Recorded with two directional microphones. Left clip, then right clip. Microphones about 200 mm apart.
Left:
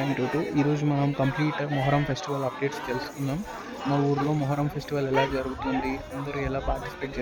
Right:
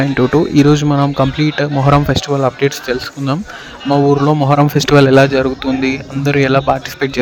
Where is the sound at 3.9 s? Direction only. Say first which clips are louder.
Right 15 dB; 50° right (ahead or behind).